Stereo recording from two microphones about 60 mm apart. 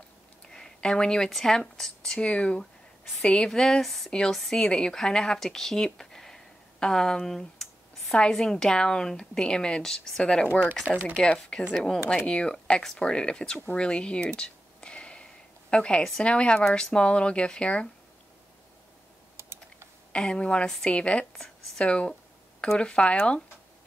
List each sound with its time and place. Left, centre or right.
0.5 s a sound: centre
1.3 s a woman's voice: centre
4.1 s a woman's voice: centre
5.9 s a sound: centre
8.1 s a woman's voice: centre
13.7 s a sound: centre
15.7 s a woman's voice: centre
19.3 s typing: right
20.1 s a woman's voice: centre